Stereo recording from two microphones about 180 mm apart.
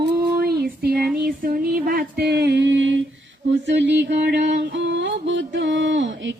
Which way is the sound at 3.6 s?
75° right (ahead or behind).